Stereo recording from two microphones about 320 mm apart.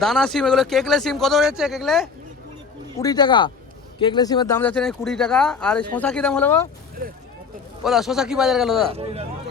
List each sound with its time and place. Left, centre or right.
0.0 s speech: centre
3.0 s speech: centre
7.9 s speech: centre
8.9 s speech: centre